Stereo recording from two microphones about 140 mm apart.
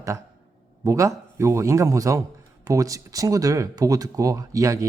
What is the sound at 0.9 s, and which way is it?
Speech, 20° right (ahead or behind).